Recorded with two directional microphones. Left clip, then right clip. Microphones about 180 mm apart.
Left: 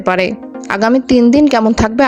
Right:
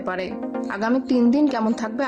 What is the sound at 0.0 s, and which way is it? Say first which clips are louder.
A woman's voice: left 13 dB; 45° left (ahead or behind).